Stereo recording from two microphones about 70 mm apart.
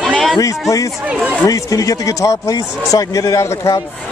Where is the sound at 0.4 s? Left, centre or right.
Left.